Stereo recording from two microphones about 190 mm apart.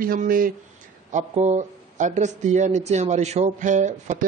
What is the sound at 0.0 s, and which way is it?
Speech, 50° right (ahead or behind).